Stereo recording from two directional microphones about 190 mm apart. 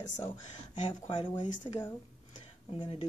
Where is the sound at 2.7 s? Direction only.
25° left (ahead or behind).